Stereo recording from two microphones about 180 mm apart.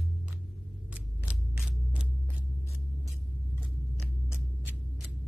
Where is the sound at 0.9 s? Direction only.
5° right (ahead or behind).